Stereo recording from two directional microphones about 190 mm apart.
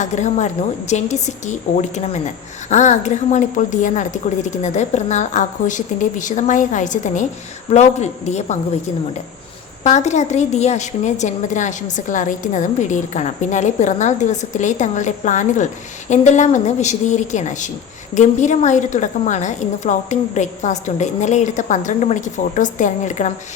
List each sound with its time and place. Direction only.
0.0 s a woman's voice: 40° left (ahead or behind)
9.8 s a woman's voice: 35° left (ahead or behind)